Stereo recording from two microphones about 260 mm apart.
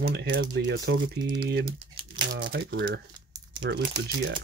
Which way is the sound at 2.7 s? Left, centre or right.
Right.